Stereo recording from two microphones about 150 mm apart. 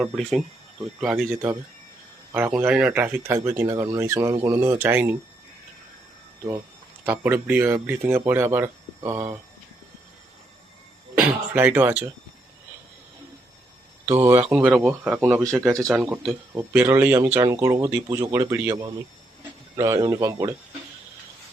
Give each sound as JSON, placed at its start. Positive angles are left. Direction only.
{"t": 0.0, "sound": "speech", "side_deg": 0}
{"t": 1.3, "sound": "speech", "side_deg": -15}
{"t": 7.0, "sound": "speech", "side_deg": -10}
{"t": 11.1, "sound": "speech", "side_deg": -15}
{"t": 14.5, "sound": "speech", "side_deg": -10}
{"t": 15.7, "sound": "speech", "side_deg": -20}